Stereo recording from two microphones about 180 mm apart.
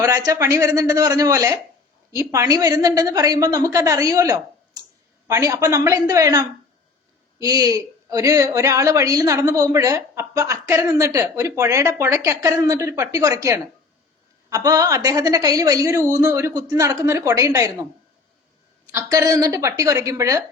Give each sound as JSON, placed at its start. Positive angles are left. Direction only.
{"t": 0.0, "sound": "a woman's voice", "side_deg": -20}
{"t": 18.9, "sound": "a woman's voice", "side_deg": -15}